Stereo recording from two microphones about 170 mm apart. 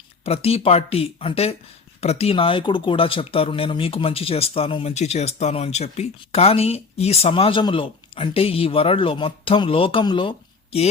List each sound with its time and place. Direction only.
0.3 s speech: 35° left (ahead or behind)